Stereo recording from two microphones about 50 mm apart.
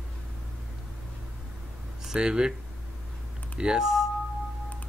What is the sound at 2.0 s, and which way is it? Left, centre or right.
Speech, centre.